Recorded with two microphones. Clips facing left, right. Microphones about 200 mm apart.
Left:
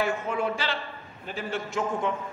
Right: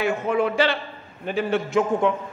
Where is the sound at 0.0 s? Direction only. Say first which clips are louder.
Right 5 dB; 65° right (ahead or behind).